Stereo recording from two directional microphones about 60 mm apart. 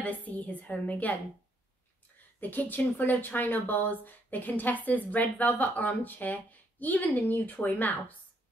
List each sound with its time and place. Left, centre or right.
0.0 s speech: left
2.4 s speech: left